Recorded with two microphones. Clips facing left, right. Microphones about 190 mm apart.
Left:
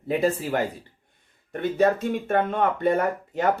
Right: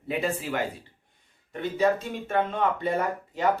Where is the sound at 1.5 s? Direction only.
55° left (ahead or behind).